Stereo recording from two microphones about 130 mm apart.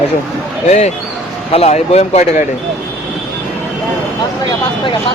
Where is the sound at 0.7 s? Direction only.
60° left (ahead or behind).